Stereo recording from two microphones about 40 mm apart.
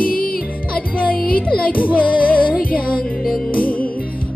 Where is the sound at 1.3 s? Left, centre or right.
Left.